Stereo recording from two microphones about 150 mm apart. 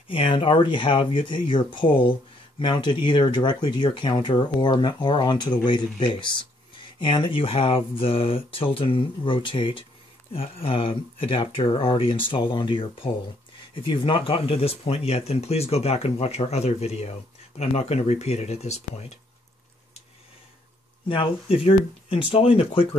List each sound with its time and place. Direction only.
0.1 s speech: 35° left (ahead or behind)
21.1 s speech: 35° left (ahead or behind)